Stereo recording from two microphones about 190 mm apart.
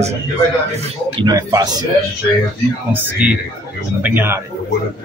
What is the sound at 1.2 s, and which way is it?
Speech, 20° right (ahead or behind).